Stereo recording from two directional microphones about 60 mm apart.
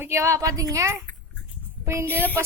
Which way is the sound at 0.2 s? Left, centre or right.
Right.